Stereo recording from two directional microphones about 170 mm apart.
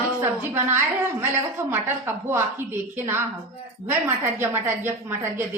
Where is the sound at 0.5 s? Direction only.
10° right (ahead or behind).